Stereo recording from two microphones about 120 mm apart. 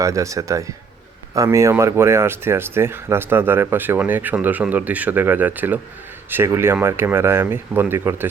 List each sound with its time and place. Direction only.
0.0 s speech: 25° right (ahead or behind)